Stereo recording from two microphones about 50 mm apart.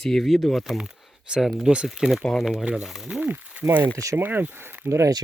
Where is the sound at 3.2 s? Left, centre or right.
Right.